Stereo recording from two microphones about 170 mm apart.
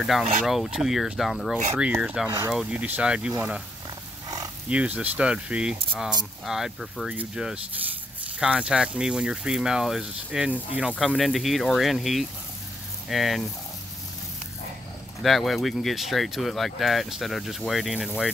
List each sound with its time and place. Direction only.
0.0 s speech: centre (ahead or behind)
2.2 s speech: 20° right (ahead or behind)
2.5 s speech: 5° right (ahead or behind)
4.6 s speech: 10° right (ahead or behind)
15.2 s speech: centre (ahead or behind)